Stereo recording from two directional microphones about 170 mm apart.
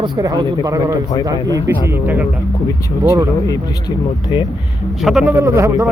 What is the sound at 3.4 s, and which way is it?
Speech, 20° left (ahead or behind).